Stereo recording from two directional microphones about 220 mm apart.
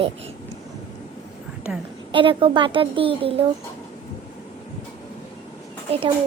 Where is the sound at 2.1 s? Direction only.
20° right (ahead or behind).